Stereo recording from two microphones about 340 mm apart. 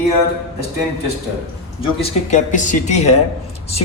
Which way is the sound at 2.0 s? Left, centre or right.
Centre.